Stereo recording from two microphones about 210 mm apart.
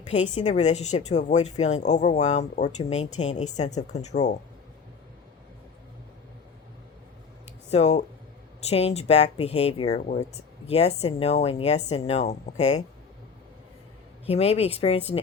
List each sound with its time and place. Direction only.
0.1 s speech: 35° left (ahead or behind)
7.7 s speech: 30° left (ahead or behind)
14.3 s speech: 30° left (ahead or behind)